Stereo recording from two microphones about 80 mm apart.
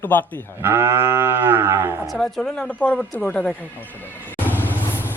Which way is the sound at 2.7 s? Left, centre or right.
Centre.